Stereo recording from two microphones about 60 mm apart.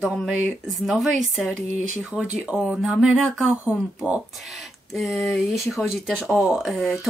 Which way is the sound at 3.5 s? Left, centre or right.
Right.